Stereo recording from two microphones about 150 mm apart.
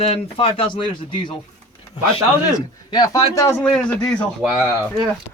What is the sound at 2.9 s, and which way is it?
Speech, 25° left (ahead or behind).